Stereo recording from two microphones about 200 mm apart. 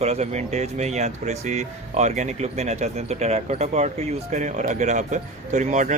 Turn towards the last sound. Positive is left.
turn(degrees=-40)  # may be behind; listen again after turning